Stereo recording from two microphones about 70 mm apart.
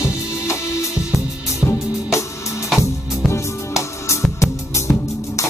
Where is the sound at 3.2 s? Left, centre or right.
Left.